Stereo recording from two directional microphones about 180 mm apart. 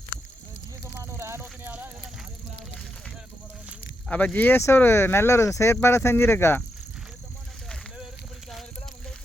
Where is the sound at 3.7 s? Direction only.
5° left (ahead or behind).